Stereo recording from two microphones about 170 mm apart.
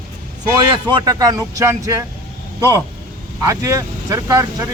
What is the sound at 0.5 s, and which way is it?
A man's voice, 25° right (ahead or behind).